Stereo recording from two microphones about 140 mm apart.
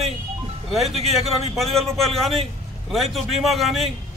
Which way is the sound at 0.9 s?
45° right (ahead or behind).